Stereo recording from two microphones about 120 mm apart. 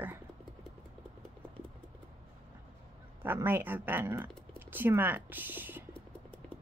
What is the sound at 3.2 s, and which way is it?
Speech, 15° right (ahead or behind).